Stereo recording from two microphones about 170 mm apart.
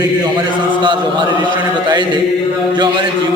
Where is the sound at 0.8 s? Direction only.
25° right (ahead or behind).